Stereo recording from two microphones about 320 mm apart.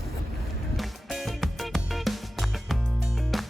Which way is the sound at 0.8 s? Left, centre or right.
Centre.